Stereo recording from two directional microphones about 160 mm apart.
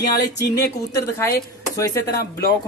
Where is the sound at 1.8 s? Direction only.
20° left (ahead or behind).